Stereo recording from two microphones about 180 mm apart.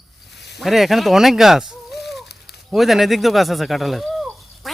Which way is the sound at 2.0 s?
Centre (ahead or behind).